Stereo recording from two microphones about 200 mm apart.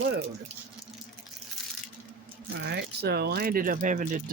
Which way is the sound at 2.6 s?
55° right (ahead or behind).